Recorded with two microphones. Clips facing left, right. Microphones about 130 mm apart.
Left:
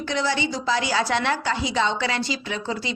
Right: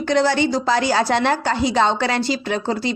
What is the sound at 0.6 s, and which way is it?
A woman's voice, 45° right (ahead or behind).